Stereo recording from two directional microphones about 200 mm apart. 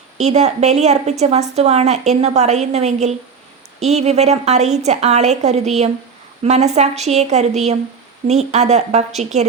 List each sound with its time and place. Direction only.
0.2 s a woman's voice: 35° right (ahead or behind)